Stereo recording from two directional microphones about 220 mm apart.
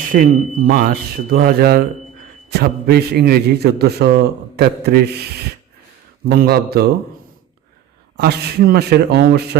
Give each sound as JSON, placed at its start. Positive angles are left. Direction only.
{"t": 0.1, "sound": "a man's voice", "side_deg": -35}
{"t": 6.2, "sound": "a man's voice", "side_deg": -45}
{"t": 8.1, "sound": "a man's voice", "side_deg": -45}